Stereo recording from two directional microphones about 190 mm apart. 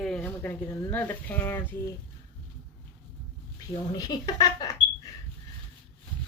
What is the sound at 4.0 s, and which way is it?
Speech, 20° left (ahead or behind).